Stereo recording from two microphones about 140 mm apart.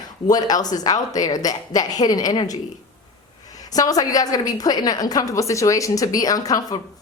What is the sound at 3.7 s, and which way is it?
A woman's voice, 25° left (ahead or behind).